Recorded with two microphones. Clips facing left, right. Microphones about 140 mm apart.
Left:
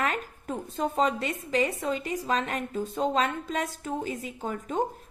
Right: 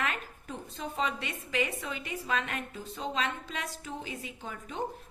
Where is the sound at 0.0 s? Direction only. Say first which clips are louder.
Left 5 dB; 40° left (ahead or behind).